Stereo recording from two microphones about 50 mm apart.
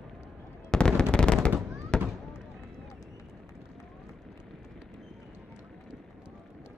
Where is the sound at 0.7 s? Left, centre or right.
Centre.